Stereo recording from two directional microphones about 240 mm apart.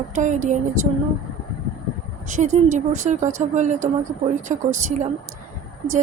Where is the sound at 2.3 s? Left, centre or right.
Right.